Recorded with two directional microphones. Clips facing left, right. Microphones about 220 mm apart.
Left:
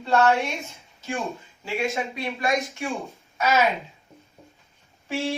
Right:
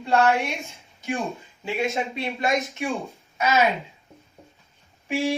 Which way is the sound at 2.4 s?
Centre (ahead or behind).